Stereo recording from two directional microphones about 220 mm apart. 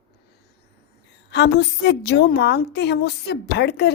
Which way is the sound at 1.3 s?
50° left (ahead or behind).